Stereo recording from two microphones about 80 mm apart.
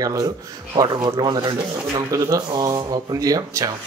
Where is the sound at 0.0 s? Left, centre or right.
Right.